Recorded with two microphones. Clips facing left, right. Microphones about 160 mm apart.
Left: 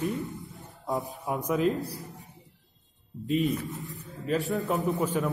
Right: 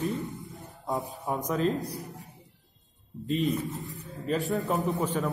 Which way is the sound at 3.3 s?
Centre (ahead or behind).